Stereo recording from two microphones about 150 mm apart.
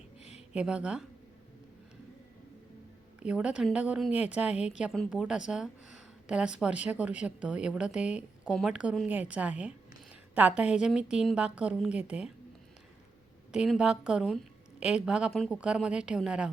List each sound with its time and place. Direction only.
0.2 s a sound: 45° left (ahead or behind)
0.5 s a woman's voice: 5° right (ahead or behind)
3.2 s a woman's voice: 5° right (ahead or behind)
13.5 s a woman's voice: 5° right (ahead or behind)